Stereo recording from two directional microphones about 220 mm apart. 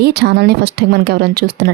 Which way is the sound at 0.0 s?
50° right (ahead or behind).